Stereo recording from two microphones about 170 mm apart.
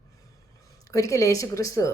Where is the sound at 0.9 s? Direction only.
20° left (ahead or behind).